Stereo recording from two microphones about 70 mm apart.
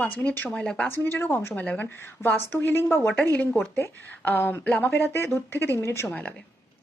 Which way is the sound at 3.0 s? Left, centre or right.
Left.